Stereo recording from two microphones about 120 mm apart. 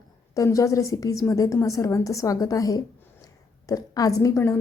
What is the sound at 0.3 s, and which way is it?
A woman's voice, 25° left (ahead or behind).